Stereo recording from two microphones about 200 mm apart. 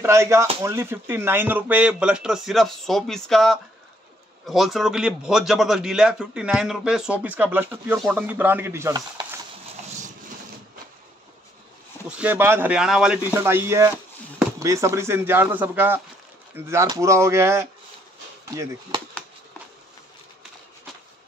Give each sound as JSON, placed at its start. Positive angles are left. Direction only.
{"t": 0.0, "sound": "a man's voice", "side_deg": -15}
{"t": 12.2, "sound": "speech", "side_deg": -10}